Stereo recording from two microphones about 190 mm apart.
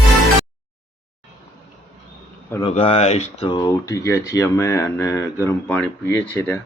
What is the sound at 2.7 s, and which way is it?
Speech, 30° left (ahead or behind).